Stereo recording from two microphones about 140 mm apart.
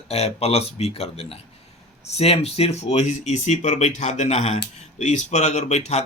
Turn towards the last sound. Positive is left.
turn(degrees=55)  # may be behind; listen again after turning